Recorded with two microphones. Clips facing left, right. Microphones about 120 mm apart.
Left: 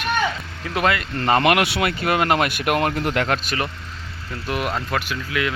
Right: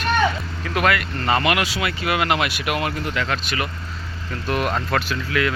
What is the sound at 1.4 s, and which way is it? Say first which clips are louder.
Speech: left 3 dB; 55° left (ahead or behind).